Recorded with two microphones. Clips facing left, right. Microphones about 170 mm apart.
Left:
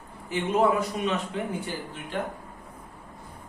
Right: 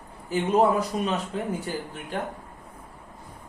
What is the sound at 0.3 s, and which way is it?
Speech, 35° right (ahead or behind).